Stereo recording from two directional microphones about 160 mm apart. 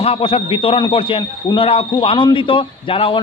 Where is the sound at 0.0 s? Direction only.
35° left (ahead or behind).